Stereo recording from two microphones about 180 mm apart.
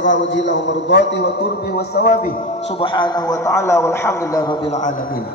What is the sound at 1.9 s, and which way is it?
Speech, 60° left (ahead or behind).